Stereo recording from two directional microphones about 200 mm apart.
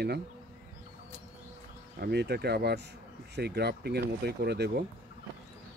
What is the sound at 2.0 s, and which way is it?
Speech, 55° right (ahead or behind).